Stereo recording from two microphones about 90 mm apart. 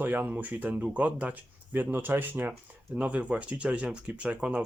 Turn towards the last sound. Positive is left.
turn(degrees=-10)  # may be behind; listen again after turning